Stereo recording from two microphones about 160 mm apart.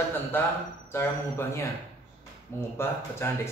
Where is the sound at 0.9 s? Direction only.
15° left (ahead or behind).